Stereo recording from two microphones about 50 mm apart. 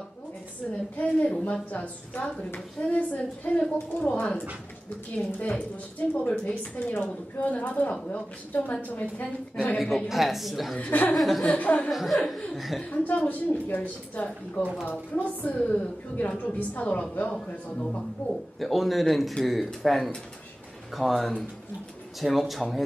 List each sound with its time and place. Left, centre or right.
0.9 s a woman's voice: left
9.8 s a woman's voice: centre
10.8 s a woman's voice: left
11.1 s a woman's voice: centre
11.4 s speech: left
11.9 s a woman's voice: centre
13.0 s a woman's voice: left
18.3 s a woman's voice: centre